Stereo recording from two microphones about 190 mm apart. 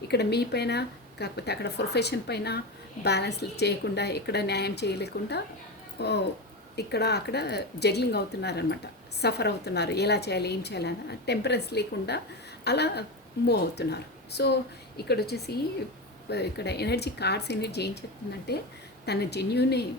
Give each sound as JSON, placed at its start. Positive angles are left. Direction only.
{"t": 0.1, "sound": "a woman's voice", "side_deg": 60}